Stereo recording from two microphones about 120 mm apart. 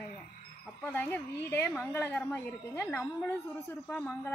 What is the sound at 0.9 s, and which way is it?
A woman's voice, 15° left (ahead or behind).